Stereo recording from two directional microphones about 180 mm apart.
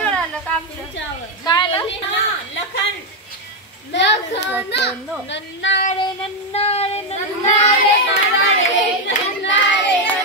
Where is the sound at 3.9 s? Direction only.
75° left (ahead or behind).